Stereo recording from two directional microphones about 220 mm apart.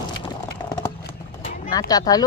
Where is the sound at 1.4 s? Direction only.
15° left (ahead or behind).